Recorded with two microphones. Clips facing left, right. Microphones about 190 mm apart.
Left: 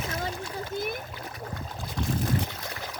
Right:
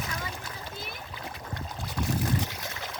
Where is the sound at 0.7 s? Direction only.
50° left (ahead or behind).